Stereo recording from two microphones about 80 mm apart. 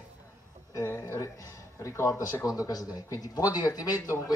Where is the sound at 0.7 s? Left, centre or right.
Left.